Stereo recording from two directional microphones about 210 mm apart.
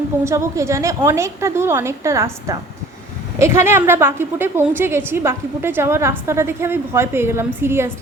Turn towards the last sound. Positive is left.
turn(degrees=-10)  # may be behind; listen again after turning